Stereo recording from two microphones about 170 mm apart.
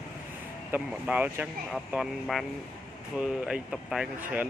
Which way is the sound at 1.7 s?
Centre (ahead or behind).